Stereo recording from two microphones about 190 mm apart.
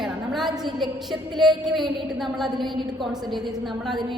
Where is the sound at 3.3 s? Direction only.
Centre (ahead or behind).